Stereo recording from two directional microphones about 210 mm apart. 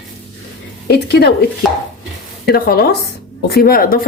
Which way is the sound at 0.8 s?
50° left (ahead or behind).